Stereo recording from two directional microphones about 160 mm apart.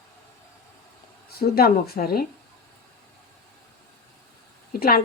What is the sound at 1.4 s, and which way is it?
Speech, 75° left (ahead or behind).